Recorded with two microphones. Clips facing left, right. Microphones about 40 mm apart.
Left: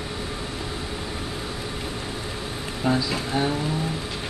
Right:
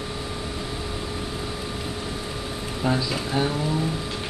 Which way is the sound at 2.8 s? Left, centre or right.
Centre.